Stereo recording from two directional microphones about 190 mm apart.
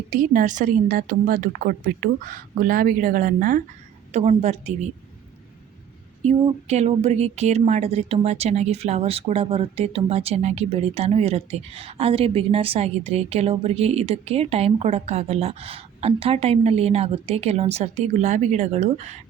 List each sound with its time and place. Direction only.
0.1 s a woman's voice: 45° right (ahead or behind)
6.4 s speech: 35° right (ahead or behind)